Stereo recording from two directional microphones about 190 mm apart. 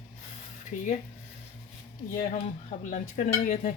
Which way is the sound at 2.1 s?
45° left (ahead or behind).